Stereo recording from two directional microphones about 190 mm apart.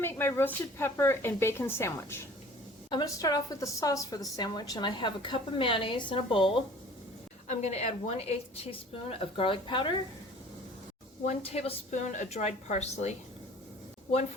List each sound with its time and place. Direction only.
0.0 s a woman's voice: 10° left (ahead or behind)
11.3 s a woman's voice: 30° left (ahead or behind)